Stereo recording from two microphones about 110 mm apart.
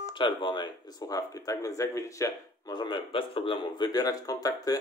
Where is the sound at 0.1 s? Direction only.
45° left (ahead or behind); by 2.3 s 30° left (ahead or behind).